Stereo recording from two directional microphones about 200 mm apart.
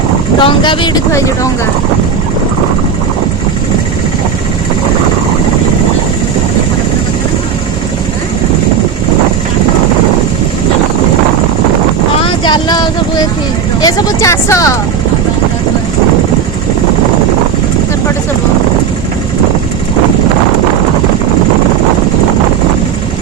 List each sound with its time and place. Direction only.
0.3 s speech: 25° left (ahead or behind)
12.2 s vehicle: 20° left (ahead or behind)
13.8 s speech: 15° left (ahead or behind)